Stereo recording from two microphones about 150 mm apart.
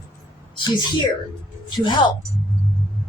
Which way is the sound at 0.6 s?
30° left (ahead or behind).